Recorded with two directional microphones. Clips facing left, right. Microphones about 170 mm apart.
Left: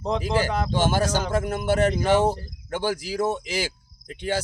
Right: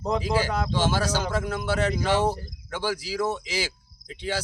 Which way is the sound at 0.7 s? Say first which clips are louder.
Left 2 dB; 50° left (ahead or behind).